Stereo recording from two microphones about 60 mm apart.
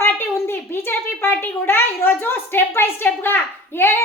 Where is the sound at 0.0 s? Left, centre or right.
Left.